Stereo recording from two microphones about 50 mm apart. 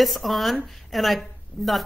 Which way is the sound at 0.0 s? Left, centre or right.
Centre.